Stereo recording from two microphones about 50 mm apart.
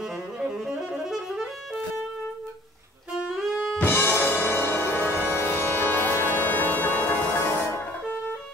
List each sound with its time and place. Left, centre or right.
0.4 s music: centre
3.2 s music: centre
3.8 s music: left